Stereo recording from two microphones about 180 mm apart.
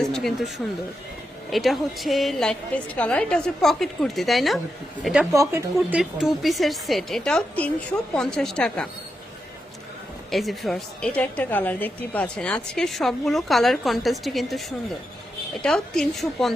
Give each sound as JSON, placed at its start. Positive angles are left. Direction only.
{"t": 0.1, "sound": "speech", "side_deg": 0}
{"t": 1.5, "sound": "a woman's voice", "side_deg": 0}
{"t": 5.3, "sound": "speech", "side_deg": -15}
{"t": 5.7, "sound": "a woman's voice", "side_deg": -5}
{"t": 10.3, "sound": "a woman's voice", "side_deg": 0}
{"t": 15.6, "sound": "a woman's voice", "side_deg": 5}